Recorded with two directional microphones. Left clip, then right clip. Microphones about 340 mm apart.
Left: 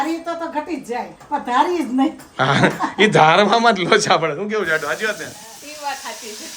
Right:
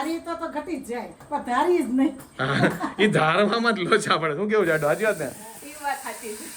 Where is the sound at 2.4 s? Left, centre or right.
Centre.